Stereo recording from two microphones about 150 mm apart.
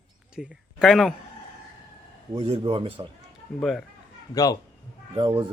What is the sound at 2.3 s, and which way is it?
Speech, 40° right (ahead or behind).